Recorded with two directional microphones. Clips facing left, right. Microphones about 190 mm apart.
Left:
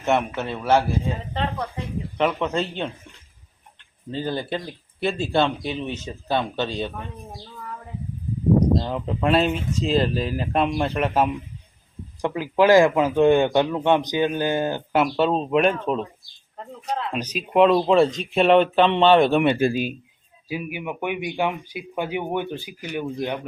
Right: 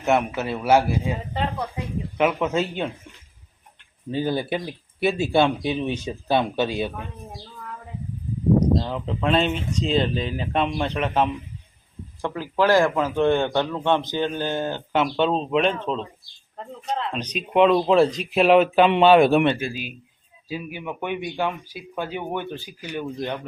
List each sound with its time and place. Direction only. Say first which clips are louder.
0.0 s speech: right 1 dB; centre (ahead or behind)
4.1 s speech: right 2 dB; 10° right (ahead or behind)
8.8 s speech: left 1 dB; 5° left (ahead or behind)
19.5 s speech: left 9 dB; 45° left (ahead or behind)
20.5 s speech: left 2 dB; 15° left (ahead or behind)